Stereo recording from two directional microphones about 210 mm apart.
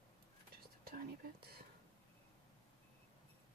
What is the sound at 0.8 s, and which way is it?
Whispering, 45° right (ahead or behind).